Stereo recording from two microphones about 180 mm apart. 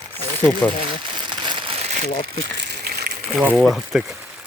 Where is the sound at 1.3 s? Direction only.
25° right (ahead or behind).